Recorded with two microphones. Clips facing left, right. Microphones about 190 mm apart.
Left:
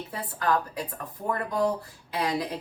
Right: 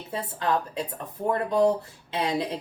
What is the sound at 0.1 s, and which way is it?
Speech, 25° right (ahead or behind).